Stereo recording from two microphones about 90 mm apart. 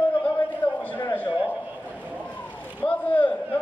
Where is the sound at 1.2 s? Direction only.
20° left (ahead or behind).